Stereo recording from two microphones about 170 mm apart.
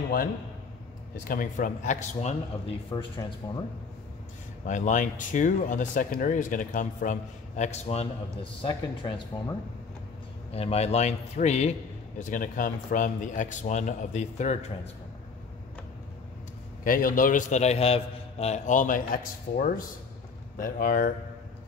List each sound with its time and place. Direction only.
1.2 s speech: 55° left (ahead or behind)
2.9 s speech: 25° left (ahead or behind)
4.6 s speech: 45° left (ahead or behind)
10.5 s speech: 35° left (ahead or behind)
16.8 s speech: 55° left (ahead or behind)